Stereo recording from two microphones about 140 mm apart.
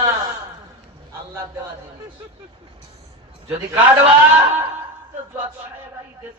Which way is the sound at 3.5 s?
15° right (ahead or behind).